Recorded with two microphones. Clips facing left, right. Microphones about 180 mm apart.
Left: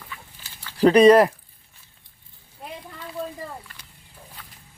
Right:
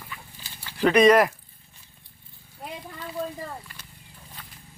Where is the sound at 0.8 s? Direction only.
35° left (ahead or behind).